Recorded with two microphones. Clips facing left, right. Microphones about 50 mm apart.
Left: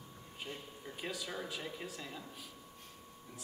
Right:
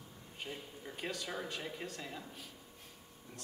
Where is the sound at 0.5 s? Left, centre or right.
Centre.